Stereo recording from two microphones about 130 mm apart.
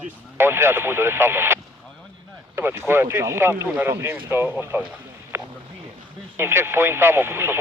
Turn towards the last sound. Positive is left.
turn(degrees=-20)  # may be behind; listen again after turning